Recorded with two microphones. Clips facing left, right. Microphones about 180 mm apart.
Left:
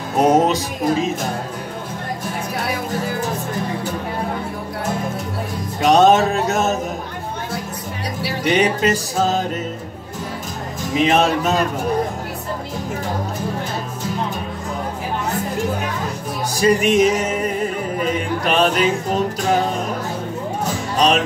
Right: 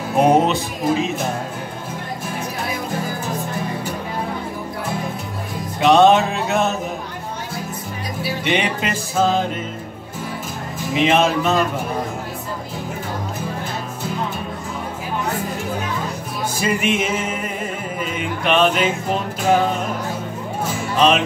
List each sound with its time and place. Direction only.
0.1 s music: 40° left (ahead or behind)
5.8 s music: 45° left (ahead or behind)
8.5 s music: 40° left (ahead or behind)
11.0 s music: 40° left (ahead or behind)
16.5 s music: 40° left (ahead or behind)
20.7 s music: 40° left (ahead or behind)